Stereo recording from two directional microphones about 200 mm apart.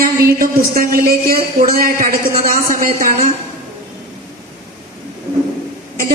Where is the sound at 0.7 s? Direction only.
45° right (ahead or behind).